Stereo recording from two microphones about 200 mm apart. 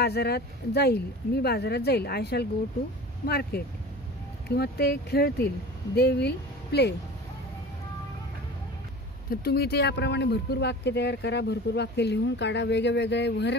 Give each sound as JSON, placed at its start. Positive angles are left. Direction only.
{"t": 0.0, "sound": "speech", "side_deg": 55}
{"t": 9.3, "sound": "speech", "side_deg": 50}